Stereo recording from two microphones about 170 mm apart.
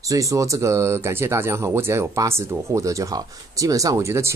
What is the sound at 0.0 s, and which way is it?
Speech, 20° right (ahead or behind).